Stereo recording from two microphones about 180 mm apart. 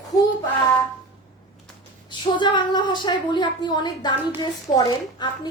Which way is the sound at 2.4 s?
25° left (ahead or behind).